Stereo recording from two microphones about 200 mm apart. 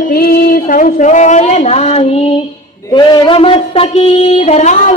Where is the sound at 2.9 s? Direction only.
25° left (ahead or behind).